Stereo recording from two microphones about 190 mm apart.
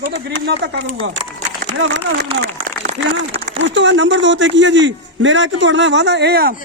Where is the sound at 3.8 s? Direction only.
70° right (ahead or behind); by 6.6 s 55° right (ahead or behind).